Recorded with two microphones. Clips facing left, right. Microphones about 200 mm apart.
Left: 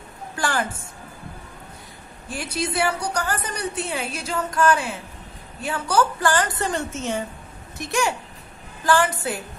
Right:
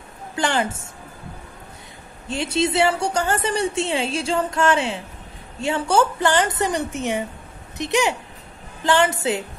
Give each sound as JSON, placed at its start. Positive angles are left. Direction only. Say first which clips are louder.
{"t": 0.4, "sound": "a woman's voice", "louder": "right 3 dB", "side_deg": -25}
{"t": 2.2, "sound": "a woman's voice", "louder": "right 6 dB", "side_deg": -25}